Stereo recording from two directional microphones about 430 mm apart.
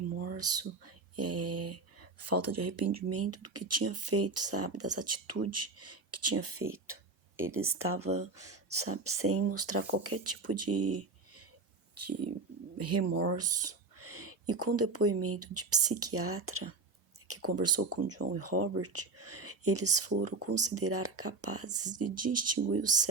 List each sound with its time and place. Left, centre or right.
0.3 s speech: right